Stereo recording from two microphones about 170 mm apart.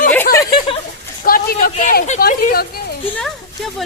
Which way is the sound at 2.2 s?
60° left (ahead or behind).